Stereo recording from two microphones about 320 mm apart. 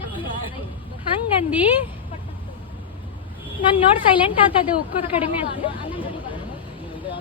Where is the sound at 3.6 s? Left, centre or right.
Centre.